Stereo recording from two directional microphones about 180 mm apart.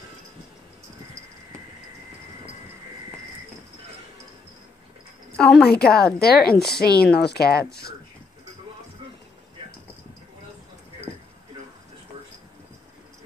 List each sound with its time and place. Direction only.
5.4 s speech: centre (ahead or behind)
5.7 s speech: 60° left (ahead or behind)
6.5 s speech: centre (ahead or behind)
6.8 s speech: 60° left (ahead or behind)